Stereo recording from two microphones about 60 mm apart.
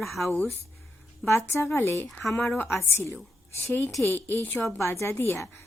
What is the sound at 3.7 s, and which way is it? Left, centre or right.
Speech, left.